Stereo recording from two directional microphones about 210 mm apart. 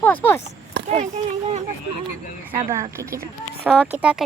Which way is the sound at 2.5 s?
15° right (ahead or behind).